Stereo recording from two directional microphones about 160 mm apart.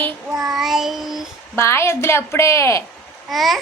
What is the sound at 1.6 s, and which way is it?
A woman's voice, 15° left (ahead or behind).